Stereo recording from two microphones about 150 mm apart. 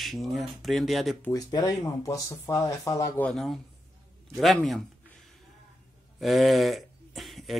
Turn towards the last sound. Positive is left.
turn(degrees=0)  # may be behind; listen again after turning